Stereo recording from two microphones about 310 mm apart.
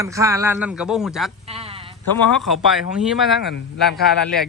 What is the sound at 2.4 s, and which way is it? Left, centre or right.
Speech, centre.